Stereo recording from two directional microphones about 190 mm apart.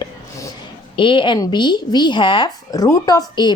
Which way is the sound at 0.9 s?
25° left (ahead or behind).